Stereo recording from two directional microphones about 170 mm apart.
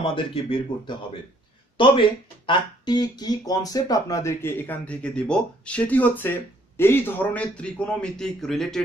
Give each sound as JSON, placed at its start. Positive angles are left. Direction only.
{"t": 0.0, "sound": "speech", "side_deg": 30}